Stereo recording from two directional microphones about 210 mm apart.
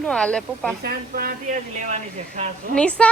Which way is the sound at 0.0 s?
5° left (ahead or behind).